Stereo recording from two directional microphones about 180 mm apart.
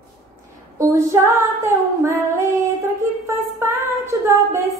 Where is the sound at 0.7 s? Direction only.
15° right (ahead or behind).